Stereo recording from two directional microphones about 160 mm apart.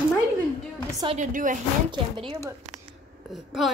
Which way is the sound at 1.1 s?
55° right (ahead or behind).